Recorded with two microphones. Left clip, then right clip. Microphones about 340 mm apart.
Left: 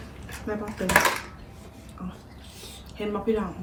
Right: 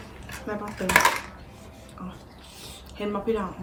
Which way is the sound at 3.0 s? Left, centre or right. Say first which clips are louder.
Even; centre.